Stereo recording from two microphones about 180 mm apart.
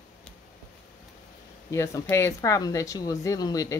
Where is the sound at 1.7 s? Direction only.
15° left (ahead or behind).